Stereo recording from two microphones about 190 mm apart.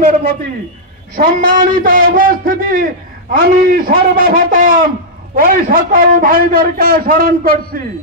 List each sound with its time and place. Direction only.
1.1 s a man's voice: 45° right (ahead or behind)